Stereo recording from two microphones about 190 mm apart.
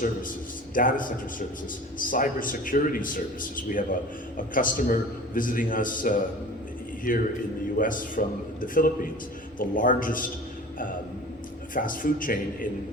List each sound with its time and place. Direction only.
0.0 s a man's voice: 45° left (ahead or behind)
11.7 s a man's voice: 45° left (ahead or behind)